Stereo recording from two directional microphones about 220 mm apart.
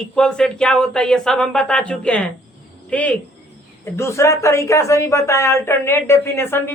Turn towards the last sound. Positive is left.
turn(degrees=10)  # may be behind; listen again after turning